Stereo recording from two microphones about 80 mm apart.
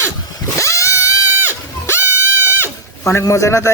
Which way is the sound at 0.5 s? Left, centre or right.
Left.